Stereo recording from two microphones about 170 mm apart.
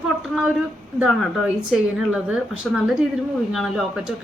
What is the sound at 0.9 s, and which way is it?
Speech, centre (ahead or behind).